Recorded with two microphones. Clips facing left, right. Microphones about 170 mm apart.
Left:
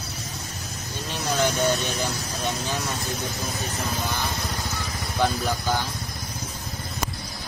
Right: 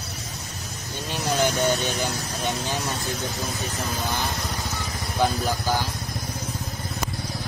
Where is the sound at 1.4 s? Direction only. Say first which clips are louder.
Even; 20° right (ahead or behind).